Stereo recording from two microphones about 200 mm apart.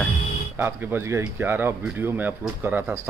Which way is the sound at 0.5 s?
10° right (ahead or behind).